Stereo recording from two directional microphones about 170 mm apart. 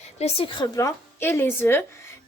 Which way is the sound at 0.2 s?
35° left (ahead or behind).